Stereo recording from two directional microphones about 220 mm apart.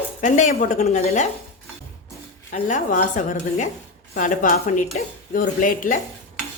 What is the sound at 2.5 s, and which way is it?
Speech, 35° left (ahead or behind).